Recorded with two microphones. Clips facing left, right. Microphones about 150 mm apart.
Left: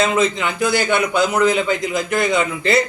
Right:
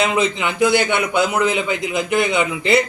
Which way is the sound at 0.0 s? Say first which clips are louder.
Left 1 dB; 20° right (ahead or behind).